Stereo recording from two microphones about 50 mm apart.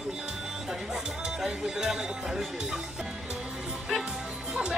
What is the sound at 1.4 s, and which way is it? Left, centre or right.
Speech, centre.